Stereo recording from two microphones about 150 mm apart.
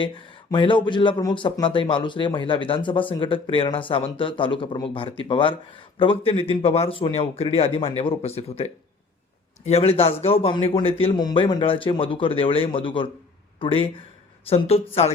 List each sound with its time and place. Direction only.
0.5 s speech: 35° left (ahead or behind)